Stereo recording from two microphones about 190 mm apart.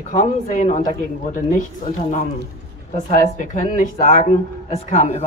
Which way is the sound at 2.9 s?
40° left (ahead or behind).